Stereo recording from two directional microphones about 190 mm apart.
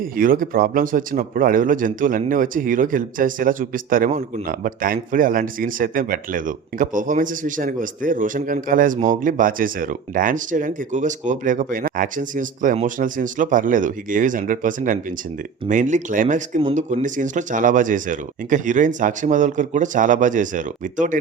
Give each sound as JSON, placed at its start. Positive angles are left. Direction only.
{"t": 0.2, "sound": "speech", "side_deg": -50}